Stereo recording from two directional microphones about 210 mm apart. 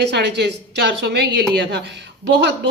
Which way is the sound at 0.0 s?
55° right (ahead or behind).